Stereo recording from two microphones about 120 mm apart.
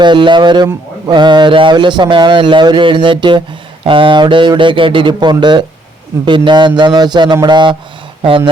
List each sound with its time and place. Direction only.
0.0 s a man's voice: 40° right (ahead or behind)